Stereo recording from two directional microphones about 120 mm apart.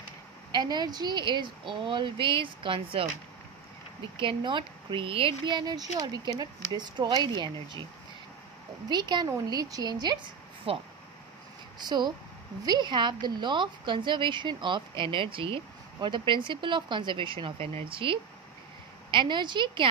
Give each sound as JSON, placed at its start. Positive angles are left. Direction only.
{"t": 0.5, "sound": "a woman's voice", "side_deg": -35}
{"t": 4.2, "sound": "a woman's voice", "side_deg": -45}
{"t": 8.8, "sound": "a woman's voice", "side_deg": -35}
{"t": 10.7, "sound": "speech", "side_deg": -50}
{"t": 11.8, "sound": "a woman's voice", "side_deg": -35}